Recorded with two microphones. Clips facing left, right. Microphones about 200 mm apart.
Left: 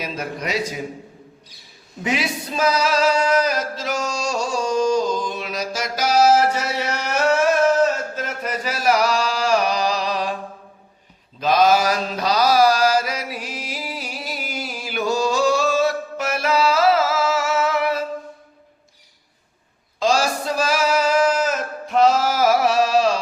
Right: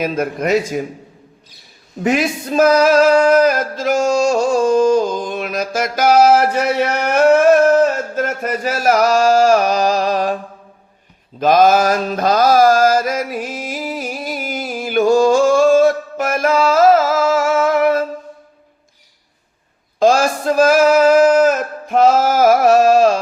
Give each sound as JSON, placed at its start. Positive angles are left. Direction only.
{"t": 0.0, "sound": "a man's voice", "side_deg": -50}
{"t": 2.0, "sound": "male singing", "side_deg": -50}
{"t": 11.3, "sound": "mantra", "side_deg": -50}
{"t": 20.0, "sound": "a sound", "side_deg": -50}